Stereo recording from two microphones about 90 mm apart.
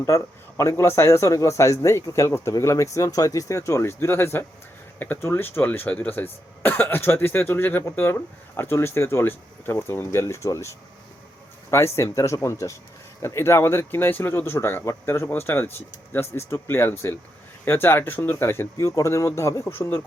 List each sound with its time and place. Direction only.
0.0 s speech: 35° left (ahead or behind)